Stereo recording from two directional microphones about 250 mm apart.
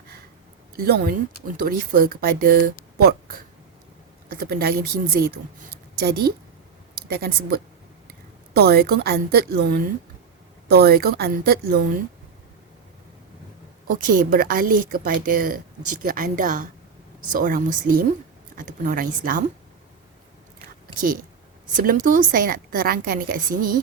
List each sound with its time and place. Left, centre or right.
0.8 s a woman's voice: right
13.8 s a woman's voice: right
21.8 s a woman's voice: right